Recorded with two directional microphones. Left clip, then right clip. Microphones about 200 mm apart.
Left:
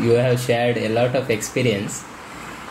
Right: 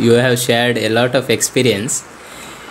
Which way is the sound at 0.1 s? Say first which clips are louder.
Right 4 dB; 50° right (ahead or behind).